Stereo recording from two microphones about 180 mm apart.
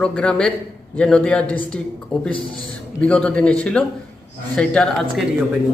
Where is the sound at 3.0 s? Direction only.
5° left (ahead or behind).